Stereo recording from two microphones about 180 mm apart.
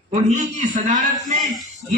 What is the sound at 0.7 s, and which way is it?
Speech, 45° right (ahead or behind).